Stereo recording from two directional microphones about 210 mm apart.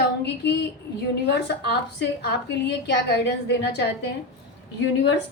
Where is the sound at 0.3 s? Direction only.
55° left (ahead or behind).